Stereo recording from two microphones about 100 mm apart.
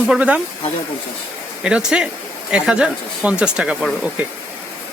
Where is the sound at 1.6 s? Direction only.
10° right (ahead or behind).